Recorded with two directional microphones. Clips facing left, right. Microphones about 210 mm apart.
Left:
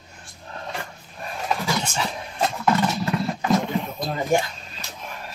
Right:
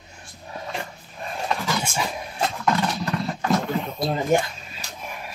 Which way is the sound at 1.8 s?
10° right (ahead or behind).